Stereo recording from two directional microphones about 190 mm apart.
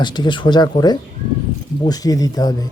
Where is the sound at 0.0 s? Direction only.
25° left (ahead or behind).